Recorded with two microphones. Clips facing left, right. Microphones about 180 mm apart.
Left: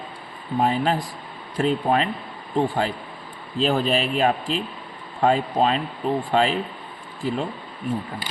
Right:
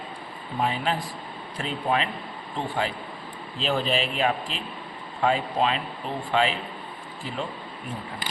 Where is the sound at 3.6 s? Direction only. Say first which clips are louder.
Left 4 dB; 45° left (ahead or behind).